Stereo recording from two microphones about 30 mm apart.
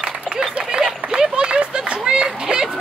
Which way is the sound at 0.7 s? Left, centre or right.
Right.